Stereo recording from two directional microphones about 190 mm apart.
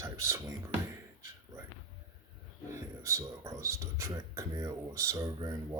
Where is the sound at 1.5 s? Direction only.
20° right (ahead or behind).